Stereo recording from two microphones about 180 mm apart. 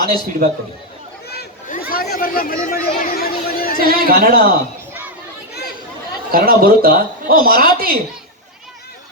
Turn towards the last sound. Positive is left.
turn(degrees=-55)  # may be behind; listen again after turning